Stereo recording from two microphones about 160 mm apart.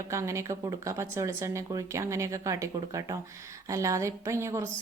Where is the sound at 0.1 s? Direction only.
20° right (ahead or behind).